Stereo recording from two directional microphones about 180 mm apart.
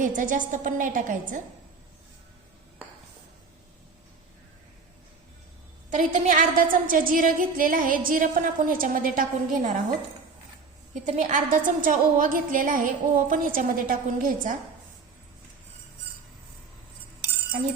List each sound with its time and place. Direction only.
0.0 s a woman's voice: 45° right (ahead or behind)
5.9 s a woman's voice: 45° right (ahead or behind)
11.0 s a woman's voice: 45° right (ahead or behind)